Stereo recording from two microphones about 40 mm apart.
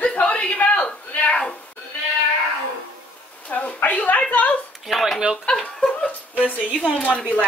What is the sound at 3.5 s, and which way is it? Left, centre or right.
Speech, left.